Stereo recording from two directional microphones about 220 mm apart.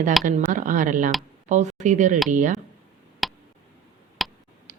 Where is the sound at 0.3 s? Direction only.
35° right (ahead or behind).